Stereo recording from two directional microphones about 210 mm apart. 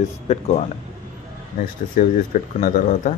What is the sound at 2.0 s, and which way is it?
Speech, 40° left (ahead or behind).